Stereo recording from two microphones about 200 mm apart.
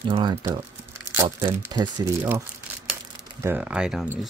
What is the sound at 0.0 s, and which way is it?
Speech, 25° right (ahead or behind).